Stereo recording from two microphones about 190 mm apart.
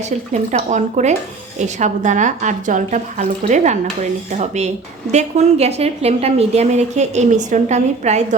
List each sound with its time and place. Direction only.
0.5 s speech: 40° right (ahead or behind)